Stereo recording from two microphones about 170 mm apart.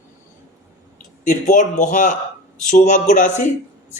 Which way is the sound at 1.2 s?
50° left (ahead or behind).